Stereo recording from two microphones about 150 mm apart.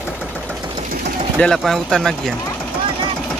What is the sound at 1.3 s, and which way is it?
Speech, 5° left (ahead or behind).